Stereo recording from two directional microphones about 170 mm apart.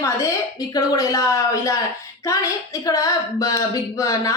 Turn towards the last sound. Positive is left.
turn(degrees=20)  # may be behind; listen again after turning